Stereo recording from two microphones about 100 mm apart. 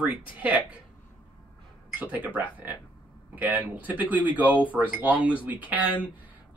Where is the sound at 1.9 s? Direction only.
10° right (ahead or behind).